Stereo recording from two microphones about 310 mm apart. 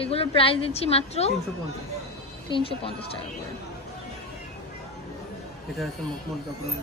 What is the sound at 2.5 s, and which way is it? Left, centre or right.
Speech, centre.